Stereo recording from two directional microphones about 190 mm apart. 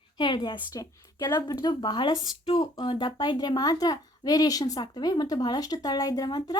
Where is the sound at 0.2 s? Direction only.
25° left (ahead or behind).